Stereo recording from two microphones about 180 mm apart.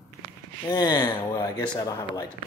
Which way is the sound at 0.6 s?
25° left (ahead or behind).